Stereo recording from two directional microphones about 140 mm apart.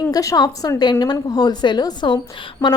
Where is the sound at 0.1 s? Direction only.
25° left (ahead or behind).